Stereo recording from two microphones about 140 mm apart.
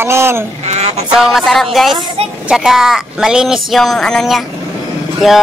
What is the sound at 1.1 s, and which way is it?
Speech, centre (ahead or behind).